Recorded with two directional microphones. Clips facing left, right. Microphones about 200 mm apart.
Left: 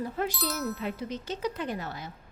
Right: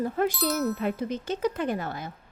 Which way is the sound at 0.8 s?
55° right (ahead or behind).